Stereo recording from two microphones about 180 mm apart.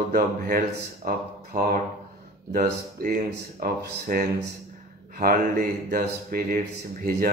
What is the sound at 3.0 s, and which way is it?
Speech, 50° right (ahead or behind).